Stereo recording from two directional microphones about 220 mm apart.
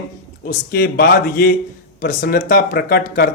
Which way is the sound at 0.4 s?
40° left (ahead or behind).